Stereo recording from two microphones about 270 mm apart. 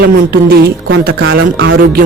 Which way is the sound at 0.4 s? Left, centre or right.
Right.